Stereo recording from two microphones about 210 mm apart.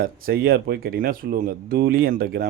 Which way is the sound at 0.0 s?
45° right (ahead or behind).